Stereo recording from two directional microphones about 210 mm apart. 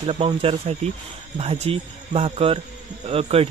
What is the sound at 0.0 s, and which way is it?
Speech, 30° right (ahead or behind).